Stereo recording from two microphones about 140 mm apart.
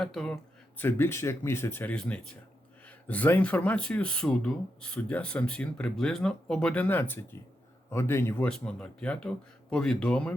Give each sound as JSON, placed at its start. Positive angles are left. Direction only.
{"t": 0.0, "sound": "speech", "side_deg": 5}
{"t": 0.8, "sound": "speech", "side_deg": 15}
{"t": 8.4, "sound": "speech", "side_deg": 5}